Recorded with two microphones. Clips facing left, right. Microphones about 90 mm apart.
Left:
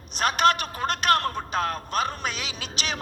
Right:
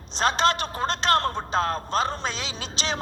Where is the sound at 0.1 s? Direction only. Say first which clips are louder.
Left 1 dB; 30° right (ahead or behind).